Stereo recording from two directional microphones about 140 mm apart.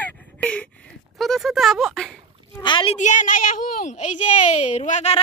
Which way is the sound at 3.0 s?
65° left (ahead or behind).